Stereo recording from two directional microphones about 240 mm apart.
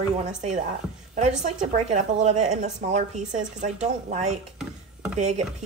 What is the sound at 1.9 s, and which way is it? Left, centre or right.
A woman's voice, right.